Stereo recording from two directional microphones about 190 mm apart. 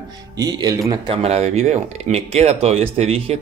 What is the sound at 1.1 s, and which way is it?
Speech, 35° right (ahead or behind).